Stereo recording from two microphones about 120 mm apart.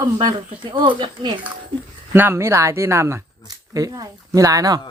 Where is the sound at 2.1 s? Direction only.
20° right (ahead or behind).